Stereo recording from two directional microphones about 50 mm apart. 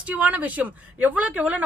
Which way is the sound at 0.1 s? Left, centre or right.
Right.